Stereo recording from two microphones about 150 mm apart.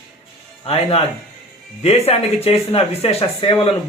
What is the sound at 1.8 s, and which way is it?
Speech, 40° left (ahead or behind).